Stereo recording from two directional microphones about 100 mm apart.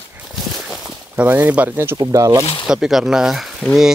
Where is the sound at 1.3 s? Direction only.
15° right (ahead or behind).